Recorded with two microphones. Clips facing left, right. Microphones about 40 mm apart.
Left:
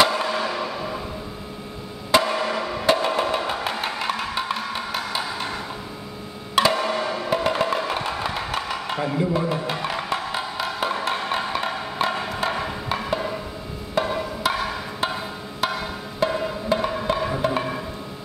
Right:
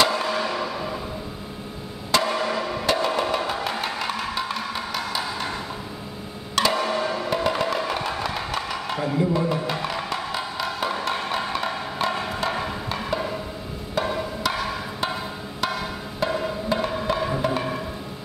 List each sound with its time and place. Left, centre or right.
0.0 s music: centre
2.0 s percussion: centre
2.3 s music: centre
6.5 s music: centre
14.0 s percussion: centre
16.2 s music: centre